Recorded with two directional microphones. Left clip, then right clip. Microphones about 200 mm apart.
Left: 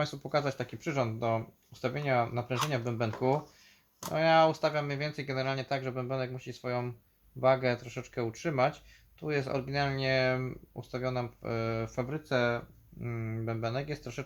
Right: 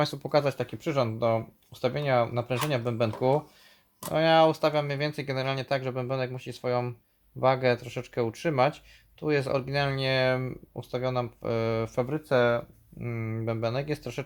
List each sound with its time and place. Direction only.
0.0 s speech: 45° right (ahead or behind)
4.1 s speech: 40° right (ahead or behind)